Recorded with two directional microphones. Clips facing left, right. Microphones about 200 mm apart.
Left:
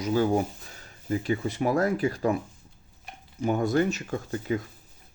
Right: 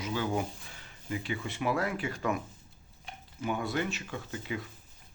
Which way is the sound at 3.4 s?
45° left (ahead or behind).